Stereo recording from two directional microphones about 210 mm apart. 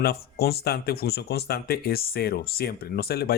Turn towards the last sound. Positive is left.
turn(degrees=50)  # may be behind; listen again after turning